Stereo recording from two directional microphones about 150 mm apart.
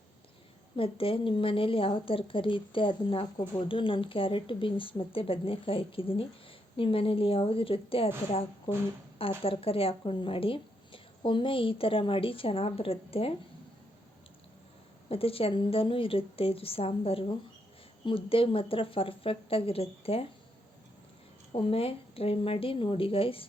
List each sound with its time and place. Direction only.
0.8 s a woman's voice: 35° left (ahead or behind)
15.1 s a woman's voice: 40° left (ahead or behind)
21.5 s a woman's voice: 40° left (ahead or behind)